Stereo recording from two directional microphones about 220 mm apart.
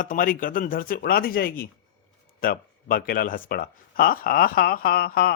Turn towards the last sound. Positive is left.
turn(degrees=45)  # may be behind; listen again after turning